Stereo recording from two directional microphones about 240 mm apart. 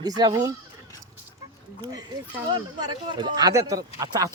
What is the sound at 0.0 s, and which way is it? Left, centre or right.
Speech, centre.